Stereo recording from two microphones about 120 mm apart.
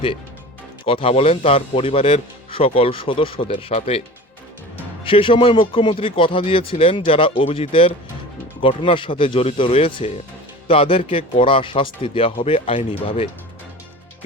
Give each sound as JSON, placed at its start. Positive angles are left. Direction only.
{"t": 0.9, "sound": "speech", "side_deg": 50}
{"t": 5.0, "sound": "speech", "side_deg": 45}